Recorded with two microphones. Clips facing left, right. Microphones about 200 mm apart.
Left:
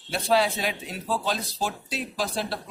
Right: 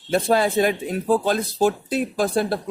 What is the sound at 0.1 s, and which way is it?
A man's voice, 50° right (ahead or behind).